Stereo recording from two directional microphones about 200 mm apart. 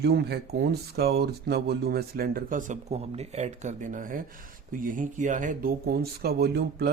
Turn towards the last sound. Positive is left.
turn(degrees=-55)  # may be behind; listen again after turning